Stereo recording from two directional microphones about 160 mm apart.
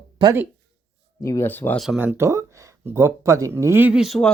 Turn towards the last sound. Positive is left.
turn(degrees=0)  # may be behind; listen again after turning